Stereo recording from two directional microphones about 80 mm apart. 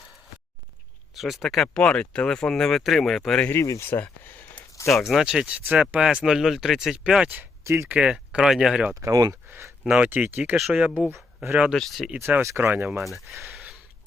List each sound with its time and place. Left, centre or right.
1.1 s speech: centre
3.5 s speech: left
3.8 s a sound: left
4.9 s speech: centre
5.2 s speech: centre
7.6 s speech: right
7.9 s speech: centre
9.0 s speech: right
9.8 s speech: centre
11.7 s speech: centre
12.4 s speech: right
13.0 s speech: centre